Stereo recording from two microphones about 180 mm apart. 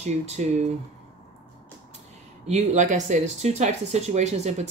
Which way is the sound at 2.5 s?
40° right (ahead or behind).